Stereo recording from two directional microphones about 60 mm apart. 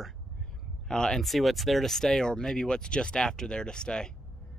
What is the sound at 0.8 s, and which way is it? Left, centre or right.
Speech, centre.